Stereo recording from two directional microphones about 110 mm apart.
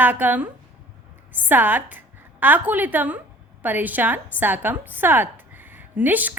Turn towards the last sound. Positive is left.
turn(degrees=-15)  # may be behind; listen again after turning